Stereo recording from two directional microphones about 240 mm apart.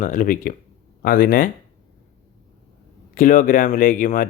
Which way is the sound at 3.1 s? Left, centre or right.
Left.